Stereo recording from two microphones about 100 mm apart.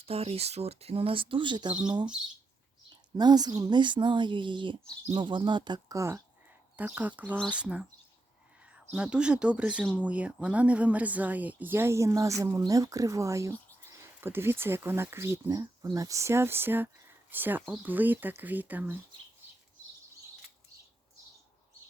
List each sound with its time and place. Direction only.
0.0 s speech: 85° right; by 1.7 s 50° right (ahead or behind)
3.2 s speech: 45° right (ahead or behind)
6.0 s speech: 30° right (ahead or behind)
6.7 s speech: 15° right (ahead or behind)